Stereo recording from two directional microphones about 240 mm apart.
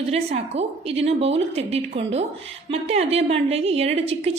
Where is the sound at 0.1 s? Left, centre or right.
Right.